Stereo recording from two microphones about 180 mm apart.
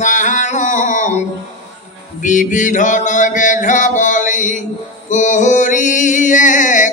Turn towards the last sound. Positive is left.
turn(degrees=45)  # may be behind; listen again after turning